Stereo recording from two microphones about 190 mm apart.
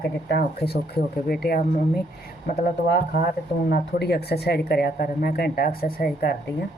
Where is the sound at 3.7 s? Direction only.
55° left (ahead or behind).